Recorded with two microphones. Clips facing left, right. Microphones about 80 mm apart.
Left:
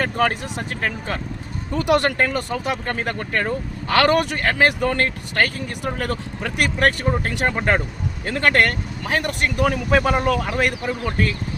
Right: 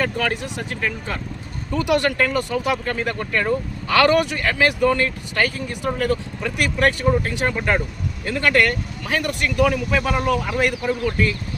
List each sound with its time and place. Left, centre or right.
0.0 s speech: left
9.0 s speech: left